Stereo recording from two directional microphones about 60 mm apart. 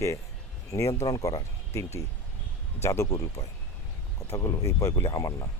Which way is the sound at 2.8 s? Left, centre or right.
Left.